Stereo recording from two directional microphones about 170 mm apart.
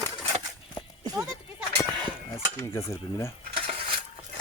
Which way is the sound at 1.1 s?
5° right (ahead or behind).